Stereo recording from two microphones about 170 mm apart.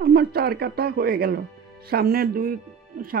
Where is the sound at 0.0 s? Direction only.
65° right (ahead or behind).